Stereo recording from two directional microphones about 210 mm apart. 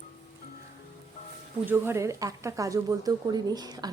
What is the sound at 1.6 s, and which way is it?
Speech, 10° right (ahead or behind).